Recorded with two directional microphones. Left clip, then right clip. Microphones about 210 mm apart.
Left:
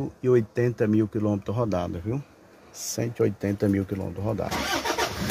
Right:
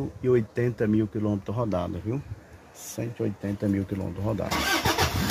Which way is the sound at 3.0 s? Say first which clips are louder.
Left 6 dB; 25° left (ahead or behind).